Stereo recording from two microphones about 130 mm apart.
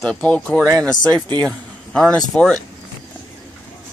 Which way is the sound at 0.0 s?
10° left (ahead or behind).